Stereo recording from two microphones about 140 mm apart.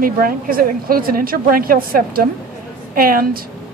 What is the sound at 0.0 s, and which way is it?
A woman's voice, 90° right.